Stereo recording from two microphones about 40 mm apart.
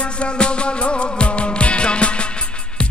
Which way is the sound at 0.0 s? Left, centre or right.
Left.